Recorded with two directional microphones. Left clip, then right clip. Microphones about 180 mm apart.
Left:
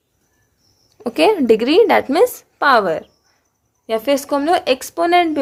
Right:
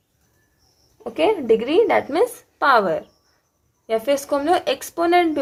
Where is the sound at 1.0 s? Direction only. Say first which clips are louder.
Left 5 dB; 50° left (ahead or behind).